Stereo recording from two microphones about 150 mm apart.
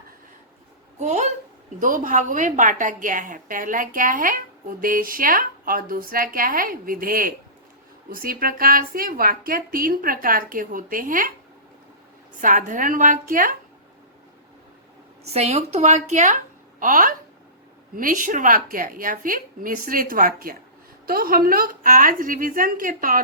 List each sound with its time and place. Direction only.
0.9 s a sound: 50° right (ahead or behind)
1.8 s a woman's voice: 60° right (ahead or behind)
12.4 s a woman's voice: 60° right (ahead or behind)
15.3 s a woman's voice: 45° right (ahead or behind)
16.8 s a woman's voice: 65° right (ahead or behind)